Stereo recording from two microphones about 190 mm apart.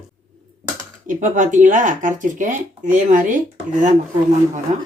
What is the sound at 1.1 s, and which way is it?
Speech, 40° right (ahead or behind).